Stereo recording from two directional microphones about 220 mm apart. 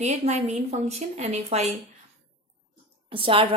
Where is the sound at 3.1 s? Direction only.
25° right (ahead or behind).